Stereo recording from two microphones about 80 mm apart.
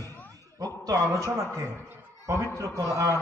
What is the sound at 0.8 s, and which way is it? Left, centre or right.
Speech, right.